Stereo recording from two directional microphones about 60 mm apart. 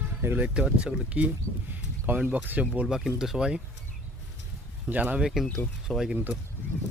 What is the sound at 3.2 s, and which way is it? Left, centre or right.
Speech, centre.